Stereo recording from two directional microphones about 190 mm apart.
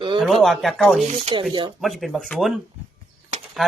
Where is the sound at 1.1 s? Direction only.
30° right (ahead or behind).